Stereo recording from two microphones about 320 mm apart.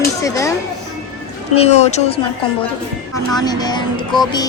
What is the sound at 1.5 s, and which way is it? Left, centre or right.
Speech, centre.